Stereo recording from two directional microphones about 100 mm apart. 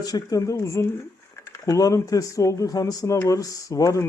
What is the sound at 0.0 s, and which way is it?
Speech, 40° left (ahead or behind).